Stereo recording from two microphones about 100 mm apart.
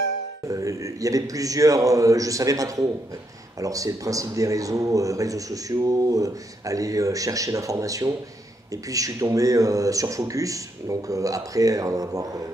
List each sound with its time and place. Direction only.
0.5 s speech: 35° right (ahead or behind)